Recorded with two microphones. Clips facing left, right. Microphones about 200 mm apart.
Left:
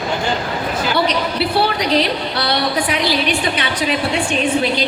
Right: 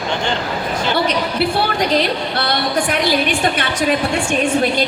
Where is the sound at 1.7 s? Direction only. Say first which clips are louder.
Even; 50° right (ahead or behind).